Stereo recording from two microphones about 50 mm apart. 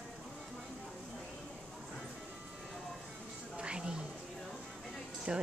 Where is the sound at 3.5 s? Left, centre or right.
Centre.